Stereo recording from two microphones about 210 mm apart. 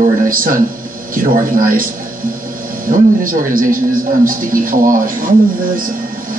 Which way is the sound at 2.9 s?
40° right (ahead or behind).